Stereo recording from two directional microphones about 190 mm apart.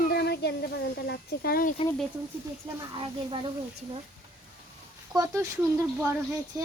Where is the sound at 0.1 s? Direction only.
60° left (ahead or behind).